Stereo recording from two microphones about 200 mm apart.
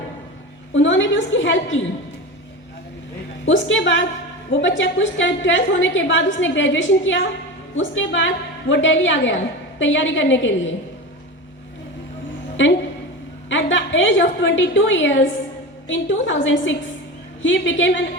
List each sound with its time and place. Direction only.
0.7 s a woman's voice: 70° left (ahead or behind)
3.4 s a woman's voice: 70° left (ahead or behind)
13.5 s a woman's voice: 70° left (ahead or behind)